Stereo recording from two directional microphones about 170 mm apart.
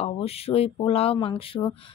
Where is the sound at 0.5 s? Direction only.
35° left (ahead or behind).